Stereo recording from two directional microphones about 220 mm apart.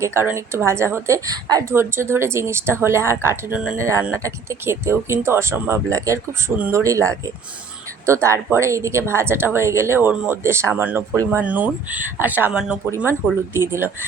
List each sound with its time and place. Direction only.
0.0 s a woman's voice: 10° right (ahead or behind)